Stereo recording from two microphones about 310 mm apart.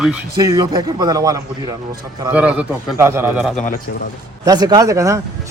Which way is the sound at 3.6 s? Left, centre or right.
Left.